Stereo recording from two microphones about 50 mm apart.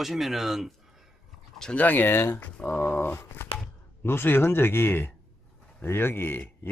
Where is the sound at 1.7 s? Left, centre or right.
Left.